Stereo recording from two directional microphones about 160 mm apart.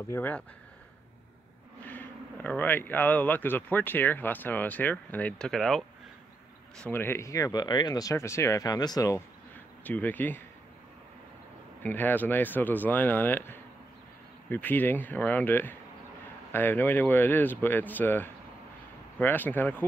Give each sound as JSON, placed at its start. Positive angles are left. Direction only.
{"t": 0.1, "sound": "speech", "side_deg": 10}
{"t": 1.9, "sound": "speech", "side_deg": 10}
{"t": 6.8, "sound": "speech", "side_deg": 15}
{"t": 9.8, "sound": "speech", "side_deg": 10}
{"t": 11.8, "sound": "speech", "side_deg": 10}